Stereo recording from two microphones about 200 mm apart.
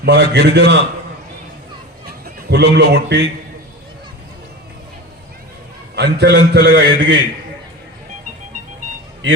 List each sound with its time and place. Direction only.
0.0 s a man's voice: 60° right (ahead or behind)
2.0 s a man's voice: 55° right (ahead or behind)
6.0 s a man's voice: 60° right (ahead or behind)